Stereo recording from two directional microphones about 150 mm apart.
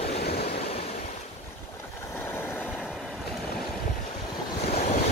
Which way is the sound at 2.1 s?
15° left (ahead or behind).